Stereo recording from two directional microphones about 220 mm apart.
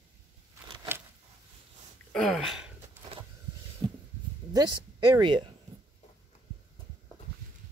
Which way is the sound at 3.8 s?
20° right (ahead or behind).